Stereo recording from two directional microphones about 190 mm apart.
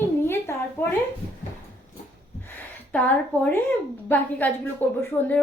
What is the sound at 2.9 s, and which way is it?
A child's voice, 10° left (ahead or behind).